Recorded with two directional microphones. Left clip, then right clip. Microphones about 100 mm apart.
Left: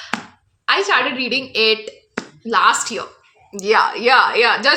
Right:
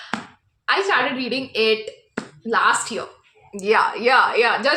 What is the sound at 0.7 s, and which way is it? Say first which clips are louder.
Speech: left 3 dB; 30° left (ahead or behind).